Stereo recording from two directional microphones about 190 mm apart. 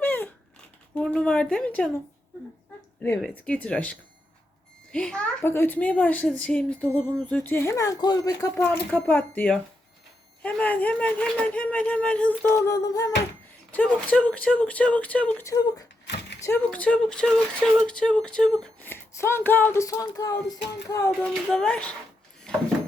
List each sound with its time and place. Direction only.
0.0 s a sound: 10° left (ahead or behind)
0.9 s speech: 5° left (ahead or behind)
3.0 s speech: 5° left (ahead or behind)
13.7 s speech: 5° left (ahead or behind)
21.1 s speech: 5° left (ahead or behind)